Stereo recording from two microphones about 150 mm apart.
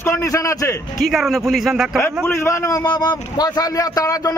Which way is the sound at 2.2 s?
15° left (ahead or behind).